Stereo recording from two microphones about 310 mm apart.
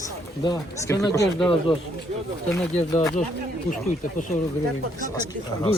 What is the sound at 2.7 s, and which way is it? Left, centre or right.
Speech, left.